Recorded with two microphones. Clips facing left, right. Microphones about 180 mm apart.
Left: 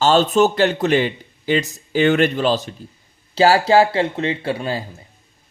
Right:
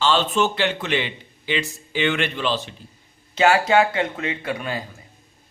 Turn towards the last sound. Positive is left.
turn(degrees=30)  # may be behind; listen again after turning